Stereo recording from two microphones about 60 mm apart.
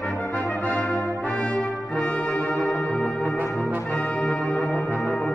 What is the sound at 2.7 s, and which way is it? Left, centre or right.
Music, centre.